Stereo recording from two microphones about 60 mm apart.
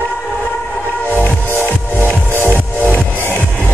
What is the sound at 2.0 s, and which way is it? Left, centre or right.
Music, right.